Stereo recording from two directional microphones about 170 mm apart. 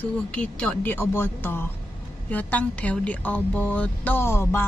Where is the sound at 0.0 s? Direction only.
5° left (ahead or behind).